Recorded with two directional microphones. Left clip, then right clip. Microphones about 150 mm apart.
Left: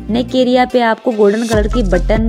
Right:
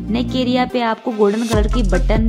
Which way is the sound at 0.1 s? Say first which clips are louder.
Left 7 dB; 30° left (ahead or behind).